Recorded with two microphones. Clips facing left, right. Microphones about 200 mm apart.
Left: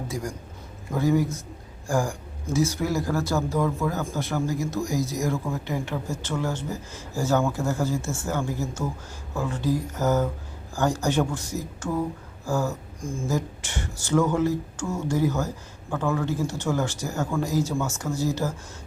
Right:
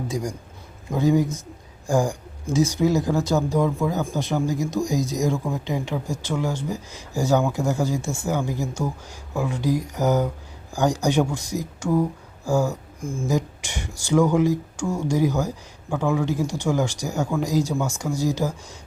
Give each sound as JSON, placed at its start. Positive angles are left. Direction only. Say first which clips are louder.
{"t": 0.1, "sound": "a man's voice", "louder": "right 4 dB", "side_deg": -15}